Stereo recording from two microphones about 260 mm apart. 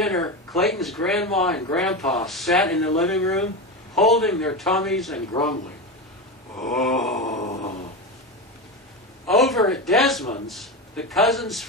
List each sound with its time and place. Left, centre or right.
0.0 s speech: centre
6.7 s speech: centre
7.2 s a sound: left
9.3 s speech: centre